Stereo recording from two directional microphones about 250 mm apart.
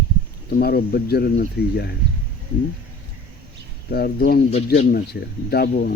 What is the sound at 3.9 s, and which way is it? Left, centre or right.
Speech, left.